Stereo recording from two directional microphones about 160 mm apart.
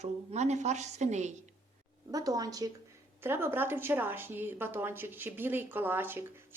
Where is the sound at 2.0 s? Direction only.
20° right (ahead or behind).